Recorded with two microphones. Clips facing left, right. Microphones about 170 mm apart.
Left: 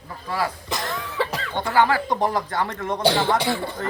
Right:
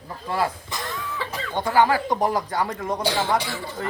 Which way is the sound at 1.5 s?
15° right (ahead or behind).